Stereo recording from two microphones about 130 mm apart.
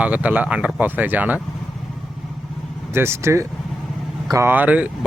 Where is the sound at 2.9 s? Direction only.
20° right (ahead or behind).